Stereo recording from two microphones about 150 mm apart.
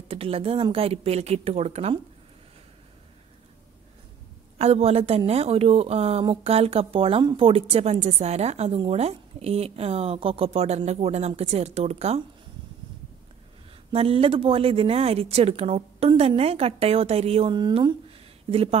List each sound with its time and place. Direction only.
0.1 s a woman's voice: 40° right (ahead or behind)
4.6 s a woman's voice: 45° right (ahead or behind)
13.9 s a woman's voice: 40° right (ahead or behind)